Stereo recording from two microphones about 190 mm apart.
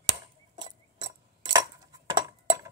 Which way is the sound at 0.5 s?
20° right (ahead or behind).